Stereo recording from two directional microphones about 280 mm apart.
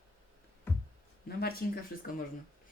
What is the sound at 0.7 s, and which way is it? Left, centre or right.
Music, centre.